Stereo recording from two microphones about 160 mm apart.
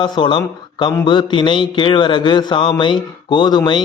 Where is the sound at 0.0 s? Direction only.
30° left (ahead or behind).